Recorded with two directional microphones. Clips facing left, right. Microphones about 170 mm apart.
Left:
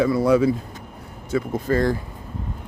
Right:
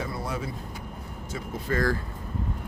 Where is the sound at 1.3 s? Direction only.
75° left (ahead or behind).